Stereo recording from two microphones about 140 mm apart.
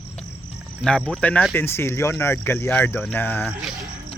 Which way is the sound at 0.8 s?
5° left (ahead or behind).